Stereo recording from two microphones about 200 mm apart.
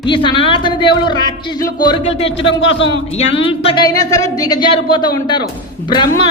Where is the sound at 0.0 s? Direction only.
25° left (ahead or behind).